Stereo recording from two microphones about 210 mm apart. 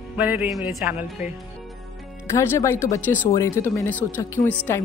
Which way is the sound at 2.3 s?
10° left (ahead or behind).